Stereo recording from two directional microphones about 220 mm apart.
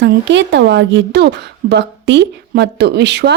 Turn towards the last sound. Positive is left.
turn(degrees=-50)  # may be behind; listen again after turning